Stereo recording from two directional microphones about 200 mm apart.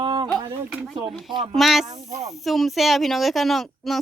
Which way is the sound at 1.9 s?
15° right (ahead or behind).